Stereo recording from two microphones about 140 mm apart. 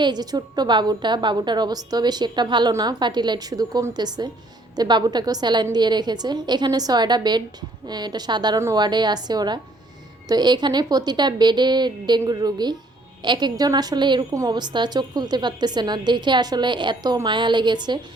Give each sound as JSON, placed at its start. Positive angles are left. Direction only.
{"t": 0.0, "sound": "a woman's voice", "side_deg": -30}